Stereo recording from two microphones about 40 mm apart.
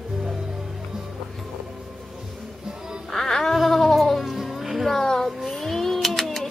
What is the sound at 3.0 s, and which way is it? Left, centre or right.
Cat, centre.